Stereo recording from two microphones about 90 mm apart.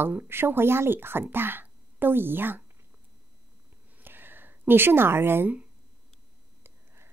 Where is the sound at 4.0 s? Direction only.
25° right (ahead or behind).